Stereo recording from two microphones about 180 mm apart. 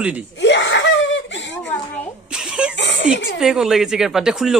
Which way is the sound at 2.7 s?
80° left.